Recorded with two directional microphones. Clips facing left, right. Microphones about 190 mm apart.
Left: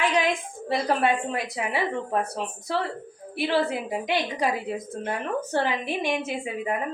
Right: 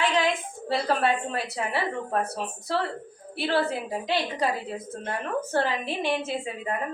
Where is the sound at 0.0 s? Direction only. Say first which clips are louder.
Left 1 dB; 15° left (ahead or behind).